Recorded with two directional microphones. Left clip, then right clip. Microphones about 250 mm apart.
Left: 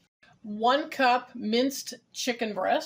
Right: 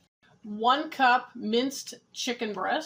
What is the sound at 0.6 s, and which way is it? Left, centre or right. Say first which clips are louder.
Speech: even; left.